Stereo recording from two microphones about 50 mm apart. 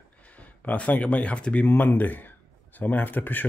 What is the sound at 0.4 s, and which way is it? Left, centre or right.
Speech, left.